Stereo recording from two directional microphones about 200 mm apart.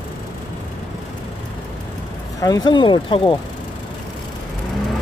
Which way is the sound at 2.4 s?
20° left (ahead or behind).